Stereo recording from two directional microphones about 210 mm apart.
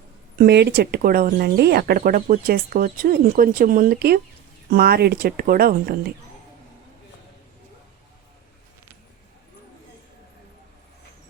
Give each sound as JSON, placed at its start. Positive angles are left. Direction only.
{"t": 0.3, "sound": "speech", "side_deg": -50}